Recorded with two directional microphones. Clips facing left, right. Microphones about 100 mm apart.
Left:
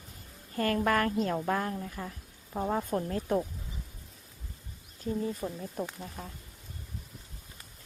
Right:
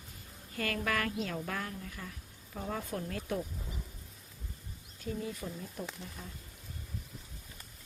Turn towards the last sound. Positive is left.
turn(degrees=45)  # may be behind; listen again after turning